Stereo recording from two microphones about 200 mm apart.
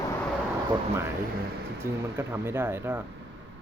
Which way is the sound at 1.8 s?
10° right (ahead or behind).